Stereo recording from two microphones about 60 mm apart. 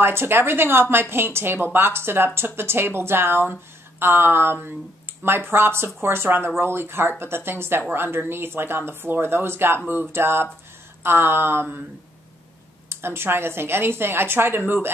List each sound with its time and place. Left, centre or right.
0.0 s speech: right
12.9 s speech: right